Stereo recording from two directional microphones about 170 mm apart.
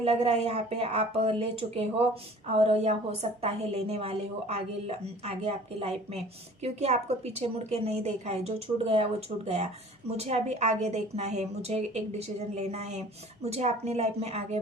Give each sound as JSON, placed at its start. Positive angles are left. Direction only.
{"t": 0.0, "sound": "a woman's voice", "side_deg": -35}
{"t": 10.1, "sound": "a woman's voice", "side_deg": -40}